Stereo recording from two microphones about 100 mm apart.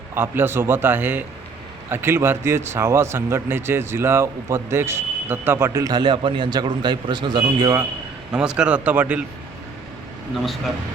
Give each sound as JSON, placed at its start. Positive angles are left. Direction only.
{"t": 0.1, "sound": "speech", "side_deg": -25}
{"t": 5.9, "sound": "a man's voice", "side_deg": -50}
{"t": 8.3, "sound": "speech", "side_deg": -10}
{"t": 10.3, "sound": "speech", "side_deg": 0}